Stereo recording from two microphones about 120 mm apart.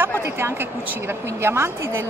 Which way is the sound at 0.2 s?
20° right (ahead or behind).